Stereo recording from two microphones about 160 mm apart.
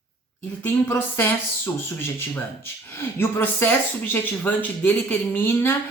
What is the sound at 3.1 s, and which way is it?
A woman's voice, 10° left (ahead or behind).